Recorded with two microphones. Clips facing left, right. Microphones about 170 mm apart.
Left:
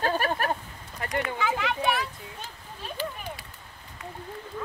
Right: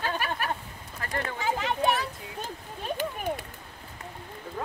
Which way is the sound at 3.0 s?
55° right (ahead or behind).